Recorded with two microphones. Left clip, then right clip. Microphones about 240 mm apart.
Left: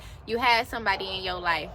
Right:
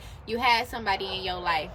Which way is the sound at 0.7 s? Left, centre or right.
Centre.